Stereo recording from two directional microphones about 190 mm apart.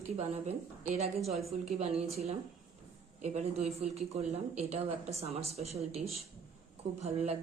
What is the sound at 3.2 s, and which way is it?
A woman's voice, 35° right (ahead or behind).